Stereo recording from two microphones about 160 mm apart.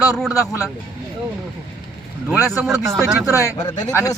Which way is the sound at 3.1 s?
10° right (ahead or behind).